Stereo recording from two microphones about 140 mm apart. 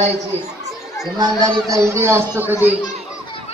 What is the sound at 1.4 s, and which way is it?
A man's voice, 20° right (ahead or behind).